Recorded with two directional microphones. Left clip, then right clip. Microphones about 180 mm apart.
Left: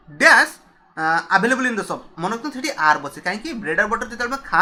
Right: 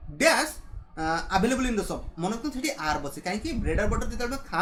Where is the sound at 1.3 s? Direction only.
30° right (ahead or behind).